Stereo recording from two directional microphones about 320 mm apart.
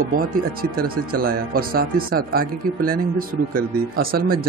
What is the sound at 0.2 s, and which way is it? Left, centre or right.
Speech, right.